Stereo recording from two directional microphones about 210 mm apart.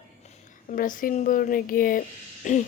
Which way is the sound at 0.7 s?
40° left (ahead or behind).